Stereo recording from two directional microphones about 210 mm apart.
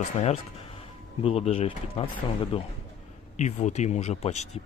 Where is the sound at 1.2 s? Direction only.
30° left (ahead or behind).